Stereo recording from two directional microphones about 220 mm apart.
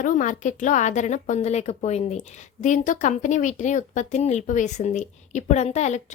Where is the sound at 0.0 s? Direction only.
35° left (ahead or behind).